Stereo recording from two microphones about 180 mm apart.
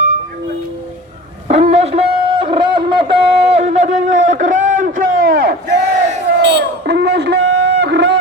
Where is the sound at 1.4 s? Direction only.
35° right (ahead or behind).